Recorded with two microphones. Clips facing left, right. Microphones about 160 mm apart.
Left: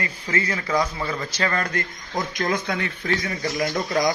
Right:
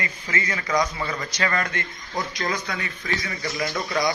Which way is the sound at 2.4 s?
50° left (ahead or behind).